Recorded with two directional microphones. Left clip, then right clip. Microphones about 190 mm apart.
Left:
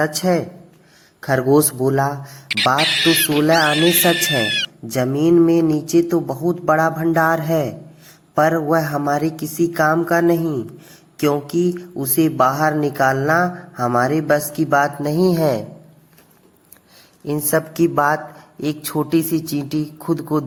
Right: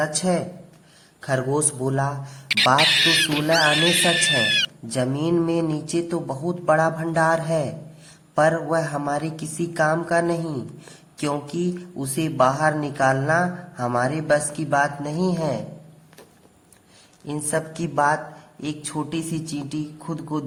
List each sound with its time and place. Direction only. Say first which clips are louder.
0.0 s speech: left 5 dB; 25° left (ahead or behind)
2.5 s speech: left 1 dB; centre (ahead or behind)
4.9 s speech: left 7 dB; 20° left (ahead or behind); by 15.6 s 35° left (ahead or behind)
17.2 s a man's voice: left 6 dB; 30° left (ahead or behind)